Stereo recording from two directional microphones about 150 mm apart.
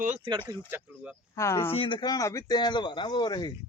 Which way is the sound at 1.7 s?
35° left (ahead or behind).